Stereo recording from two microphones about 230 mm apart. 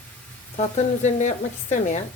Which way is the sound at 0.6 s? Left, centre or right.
Left.